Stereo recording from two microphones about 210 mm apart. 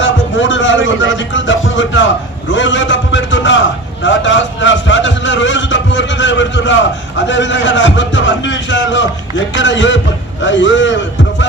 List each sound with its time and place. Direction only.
0.0 s a man's voice: 60° left (ahead or behind)